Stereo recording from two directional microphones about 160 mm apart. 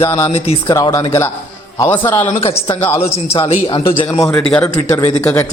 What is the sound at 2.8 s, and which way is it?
Speech, 15° left (ahead or behind).